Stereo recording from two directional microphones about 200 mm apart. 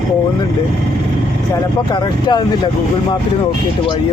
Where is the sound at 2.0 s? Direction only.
20° left (ahead or behind).